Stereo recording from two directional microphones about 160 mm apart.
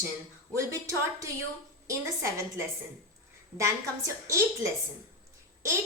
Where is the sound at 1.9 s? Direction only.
20° right (ahead or behind).